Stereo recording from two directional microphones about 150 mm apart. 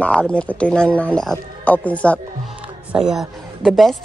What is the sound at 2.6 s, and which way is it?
A woman's voice, 5° right (ahead or behind).